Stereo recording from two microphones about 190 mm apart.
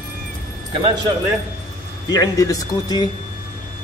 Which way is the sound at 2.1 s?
20° left (ahead or behind).